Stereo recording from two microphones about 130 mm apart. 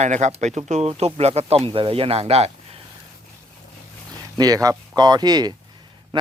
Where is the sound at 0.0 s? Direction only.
65° right (ahead or behind).